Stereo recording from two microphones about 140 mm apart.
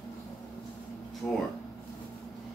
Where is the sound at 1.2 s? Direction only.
15° left (ahead or behind).